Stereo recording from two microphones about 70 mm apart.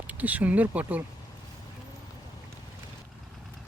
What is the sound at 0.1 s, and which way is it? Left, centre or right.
Speech, right.